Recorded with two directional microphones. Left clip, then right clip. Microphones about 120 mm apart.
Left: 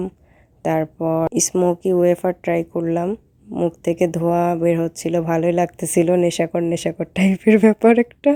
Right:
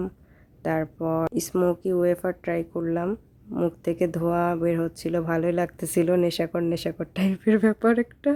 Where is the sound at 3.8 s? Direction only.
20° left (ahead or behind).